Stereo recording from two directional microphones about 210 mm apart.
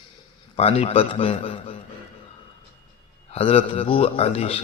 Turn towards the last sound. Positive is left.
turn(degrees=30)  # may be behind; listen again after turning